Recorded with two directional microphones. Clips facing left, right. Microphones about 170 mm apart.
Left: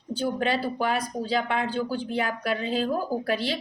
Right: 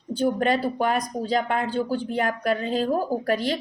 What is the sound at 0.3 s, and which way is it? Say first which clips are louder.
A woman's voice: right 3 dB; 45° right (ahead or behind).